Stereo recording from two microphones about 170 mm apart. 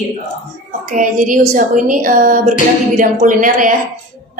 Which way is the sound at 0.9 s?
50° right (ahead or behind).